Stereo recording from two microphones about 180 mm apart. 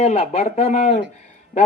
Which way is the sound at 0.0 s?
40° left (ahead or behind).